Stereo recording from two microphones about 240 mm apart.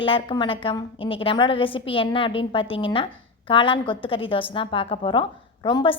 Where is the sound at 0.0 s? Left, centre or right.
Left.